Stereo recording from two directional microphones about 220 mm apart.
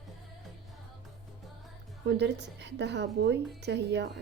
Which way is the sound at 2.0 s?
50° right (ahead or behind).